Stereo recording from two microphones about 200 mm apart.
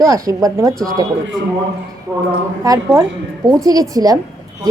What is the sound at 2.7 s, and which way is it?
Speech, 20° right (ahead or behind).